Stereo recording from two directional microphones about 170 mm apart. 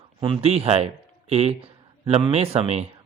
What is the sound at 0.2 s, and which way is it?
A man's voice, 30° right (ahead or behind).